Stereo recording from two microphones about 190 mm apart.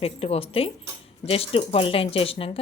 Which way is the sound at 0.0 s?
30° left (ahead or behind).